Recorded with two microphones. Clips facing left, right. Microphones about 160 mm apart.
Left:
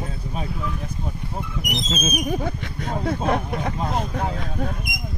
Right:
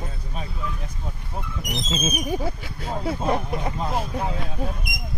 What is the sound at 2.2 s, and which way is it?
Speech, 5° right (ahead or behind).